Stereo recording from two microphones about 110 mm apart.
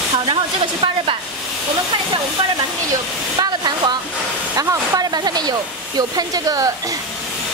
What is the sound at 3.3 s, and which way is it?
Speech, 40° right (ahead or behind).